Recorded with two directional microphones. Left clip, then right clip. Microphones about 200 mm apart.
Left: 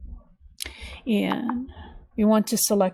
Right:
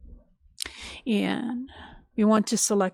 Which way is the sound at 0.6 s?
35° right (ahead or behind).